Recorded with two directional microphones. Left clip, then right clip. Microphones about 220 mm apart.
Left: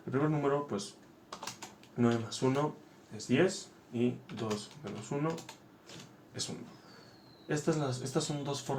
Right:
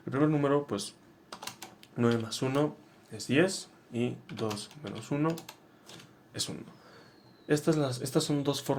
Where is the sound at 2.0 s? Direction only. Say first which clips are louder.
Right 2 dB; 55° right (ahead or behind).